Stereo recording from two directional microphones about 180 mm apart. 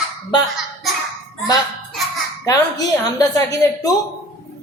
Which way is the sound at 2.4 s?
20° left (ahead or behind).